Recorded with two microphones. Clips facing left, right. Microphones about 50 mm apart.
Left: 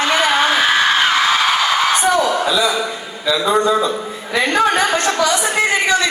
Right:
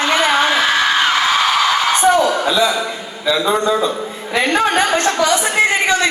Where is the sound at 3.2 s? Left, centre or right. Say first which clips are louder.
Even; right.